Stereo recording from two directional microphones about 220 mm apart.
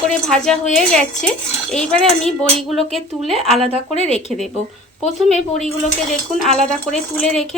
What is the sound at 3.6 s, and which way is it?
Speech, 25° right (ahead or behind).